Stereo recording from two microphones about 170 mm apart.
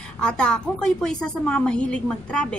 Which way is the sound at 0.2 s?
5° left (ahead or behind).